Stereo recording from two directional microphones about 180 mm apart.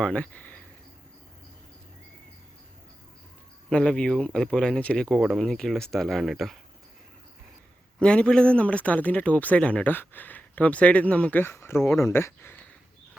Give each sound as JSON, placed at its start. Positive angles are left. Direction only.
{"t": 0.0, "sound": "speech", "side_deg": 5}
{"t": 3.7, "sound": "speech", "side_deg": 5}
{"t": 8.0, "sound": "speech", "side_deg": 5}